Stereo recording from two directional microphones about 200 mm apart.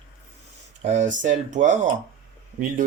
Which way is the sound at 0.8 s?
35° right (ahead or behind).